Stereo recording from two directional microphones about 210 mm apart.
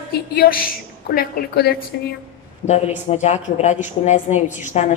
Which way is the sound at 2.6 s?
30° left (ahead or behind).